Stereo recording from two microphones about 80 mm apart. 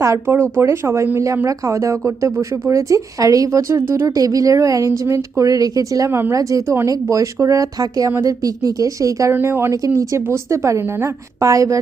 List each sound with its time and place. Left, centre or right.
0.0 s speech: right
1.5 s speech: right
4.0 s speech: right
6.1 s speech: right
6.3 s speech: right
9.3 s speech: right
9.7 s speech: right